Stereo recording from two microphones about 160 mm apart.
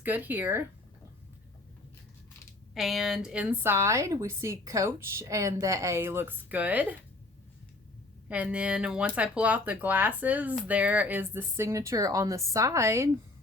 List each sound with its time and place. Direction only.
0.0 s a woman's voice: 10° right (ahead or behind)
2.7 s a woman's voice: centre (ahead or behind)
8.3 s a woman's voice: 5° right (ahead or behind)